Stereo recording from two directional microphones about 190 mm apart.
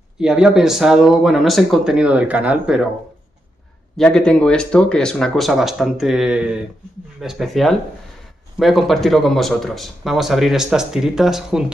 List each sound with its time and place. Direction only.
0.2 s speech: 5° right (ahead or behind)
3.9 s speech: 5° left (ahead or behind)